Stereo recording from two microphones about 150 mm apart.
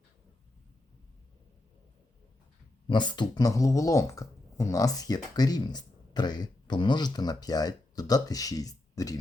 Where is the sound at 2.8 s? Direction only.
30° left (ahead or behind).